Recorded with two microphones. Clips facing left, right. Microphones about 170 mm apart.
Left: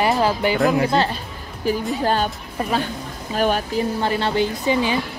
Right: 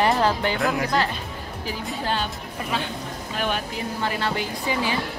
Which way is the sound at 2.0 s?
45° left (ahead or behind).